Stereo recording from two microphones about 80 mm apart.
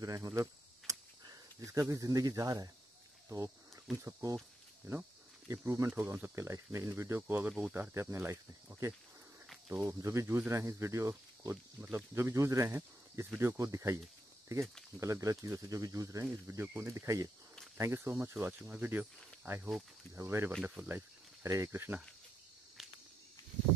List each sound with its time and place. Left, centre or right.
0.0 s cricket: right
1.2 s speech: right
3.3 s a sound: right
4.0 s speech: right
5.5 s speech: right
5.9 s speech: right
7.9 s speech: right
15.0 s speech: right
21.4 s speech: right
22.8 s cricket: centre